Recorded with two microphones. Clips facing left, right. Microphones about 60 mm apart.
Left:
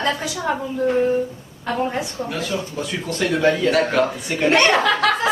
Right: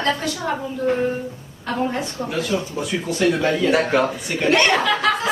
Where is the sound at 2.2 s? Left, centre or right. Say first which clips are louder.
Right 2 dB; centre.